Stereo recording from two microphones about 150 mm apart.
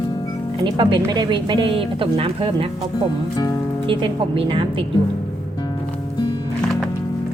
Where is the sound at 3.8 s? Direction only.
35° right (ahead or behind).